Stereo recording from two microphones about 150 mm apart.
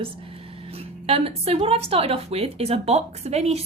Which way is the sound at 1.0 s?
40° right (ahead or behind).